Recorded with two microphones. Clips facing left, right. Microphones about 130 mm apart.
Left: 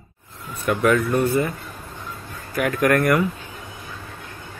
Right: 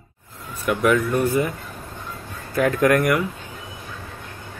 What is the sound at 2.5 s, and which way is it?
Speech, 25° right (ahead or behind).